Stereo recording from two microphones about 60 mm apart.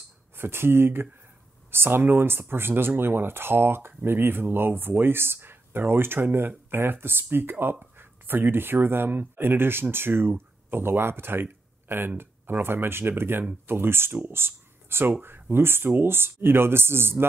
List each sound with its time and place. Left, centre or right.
0.4 s speech: right